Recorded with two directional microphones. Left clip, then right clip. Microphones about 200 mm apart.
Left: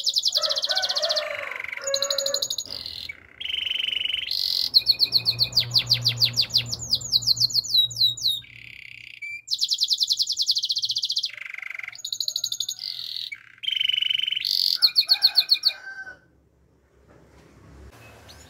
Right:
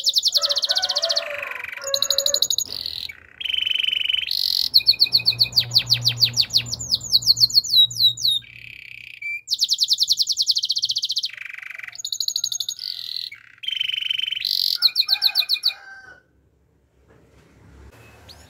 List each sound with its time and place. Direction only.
0.0 s bird: 20° right (ahead or behind)